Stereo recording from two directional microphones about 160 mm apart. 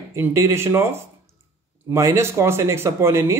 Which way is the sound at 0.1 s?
15° right (ahead or behind).